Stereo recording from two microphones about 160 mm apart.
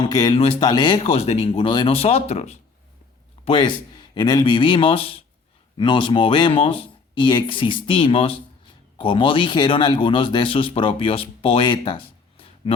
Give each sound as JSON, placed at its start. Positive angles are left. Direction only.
{"t": 0.1, "sound": "a man's voice", "side_deg": 25}
{"t": 3.4, "sound": "a man's voice", "side_deg": 30}